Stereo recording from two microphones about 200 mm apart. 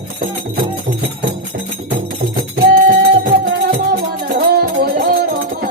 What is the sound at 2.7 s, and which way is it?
Music, 45° right (ahead or behind).